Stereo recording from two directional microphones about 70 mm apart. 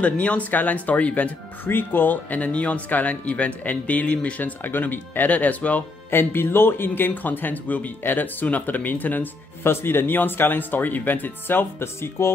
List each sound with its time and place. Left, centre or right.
0.0 s speech: centre
6.0 s speech: left